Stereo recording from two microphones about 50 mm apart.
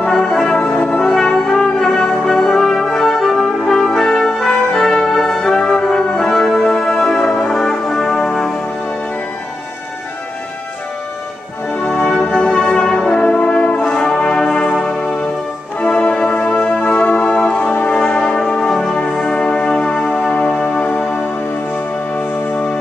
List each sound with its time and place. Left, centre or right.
0.0 s brass instrument: centre
12.2 s music: left
13.2 s brass instrument: left
15.8 s music: left
17.8 s brass instrument: centre
18.7 s music: centre
20.8 s music: left